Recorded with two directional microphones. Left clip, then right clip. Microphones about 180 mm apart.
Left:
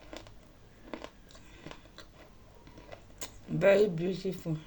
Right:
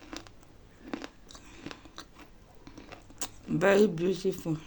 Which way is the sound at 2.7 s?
45° right (ahead or behind).